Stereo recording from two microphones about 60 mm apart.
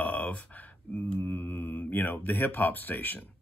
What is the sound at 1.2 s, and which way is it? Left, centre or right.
Speech, left.